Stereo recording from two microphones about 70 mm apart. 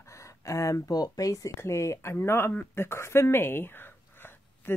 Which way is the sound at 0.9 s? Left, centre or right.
Left.